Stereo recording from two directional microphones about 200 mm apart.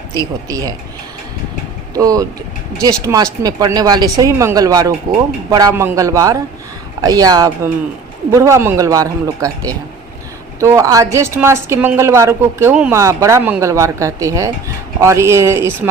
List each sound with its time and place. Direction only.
0.2 s a woman's voice: 15° right (ahead or behind)
2.0 s a woman's voice: 15° right (ahead or behind)